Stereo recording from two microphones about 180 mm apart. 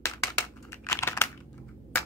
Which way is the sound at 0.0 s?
15° left (ahead or behind).